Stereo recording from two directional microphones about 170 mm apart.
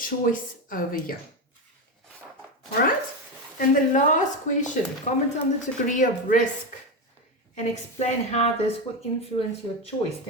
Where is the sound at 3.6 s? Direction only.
50° left (ahead or behind).